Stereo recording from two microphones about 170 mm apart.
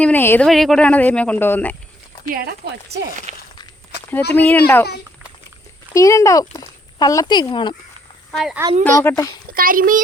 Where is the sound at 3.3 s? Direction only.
40° right (ahead or behind).